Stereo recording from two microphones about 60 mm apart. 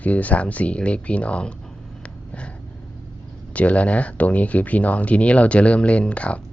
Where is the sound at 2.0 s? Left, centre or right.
Centre.